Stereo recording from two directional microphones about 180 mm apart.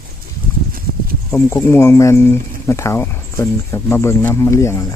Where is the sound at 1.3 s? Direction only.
15° left (ahead or behind).